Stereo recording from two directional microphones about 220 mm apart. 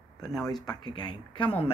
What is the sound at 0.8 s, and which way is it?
Speech, 20° left (ahead or behind).